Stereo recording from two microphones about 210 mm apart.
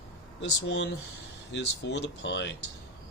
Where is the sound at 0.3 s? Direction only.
60° left (ahead or behind).